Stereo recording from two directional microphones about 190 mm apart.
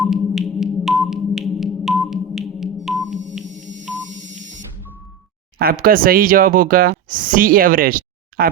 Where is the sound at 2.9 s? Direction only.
Centre (ahead or behind).